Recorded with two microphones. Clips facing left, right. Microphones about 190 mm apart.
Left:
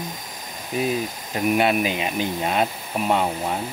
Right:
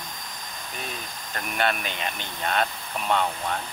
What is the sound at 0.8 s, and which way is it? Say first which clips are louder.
Speech: left 14 dB; 5° left (ahead or behind).